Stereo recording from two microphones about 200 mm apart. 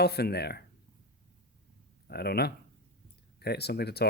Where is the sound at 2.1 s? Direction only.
50° left (ahead or behind).